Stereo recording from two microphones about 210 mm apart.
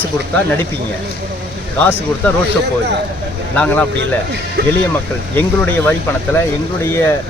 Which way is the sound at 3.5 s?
5° left (ahead or behind).